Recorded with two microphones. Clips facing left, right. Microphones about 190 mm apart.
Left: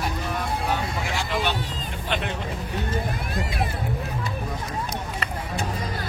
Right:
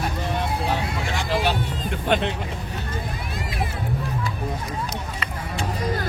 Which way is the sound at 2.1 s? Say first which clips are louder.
Right 7 dB; 45° right (ahead or behind).